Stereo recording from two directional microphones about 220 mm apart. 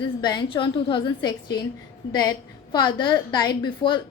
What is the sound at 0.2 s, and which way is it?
A woman's voice, 20° left (ahead or behind).